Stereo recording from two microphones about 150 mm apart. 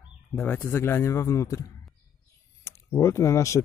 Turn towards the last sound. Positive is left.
turn(degrees=20)  # may be behind; listen again after turning